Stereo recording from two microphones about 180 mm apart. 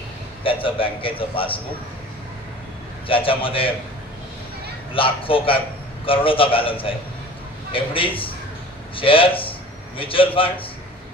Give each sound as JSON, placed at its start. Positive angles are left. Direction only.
{"t": 0.4, "sound": "a man's voice", "side_deg": 30}
{"t": 3.1, "sound": "a man's voice", "side_deg": 30}
{"t": 4.9, "sound": "a man's voice", "side_deg": 30}